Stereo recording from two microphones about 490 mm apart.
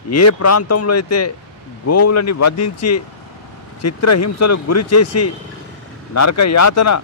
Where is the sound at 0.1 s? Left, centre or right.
Left.